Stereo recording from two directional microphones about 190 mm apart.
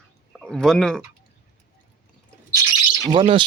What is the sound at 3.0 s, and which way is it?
Speech, 25° right (ahead or behind).